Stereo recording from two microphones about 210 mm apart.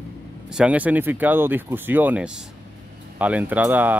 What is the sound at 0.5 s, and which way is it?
Speech, 5° right (ahead or behind).